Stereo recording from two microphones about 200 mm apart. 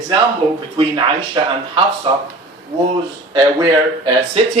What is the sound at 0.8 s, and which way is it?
Speech, 25° right (ahead or behind).